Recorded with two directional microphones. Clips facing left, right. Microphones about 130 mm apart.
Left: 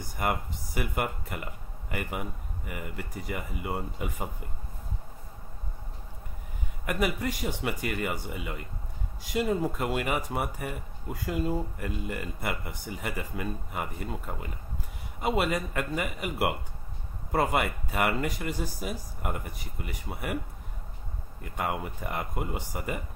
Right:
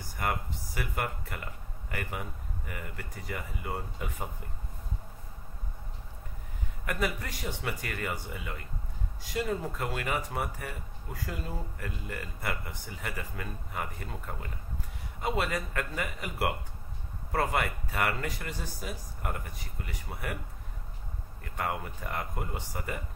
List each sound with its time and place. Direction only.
0.2 s speech: 15° left (ahead or behind)
6.9 s speech: 15° left (ahead or behind)
21.5 s speech: 15° left (ahead or behind)